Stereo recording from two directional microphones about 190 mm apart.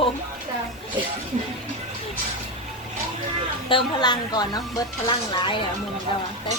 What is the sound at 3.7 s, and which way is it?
A woman's voice, 20° left (ahead or behind).